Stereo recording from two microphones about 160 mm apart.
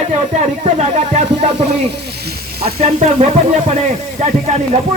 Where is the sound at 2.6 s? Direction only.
45° right (ahead or behind).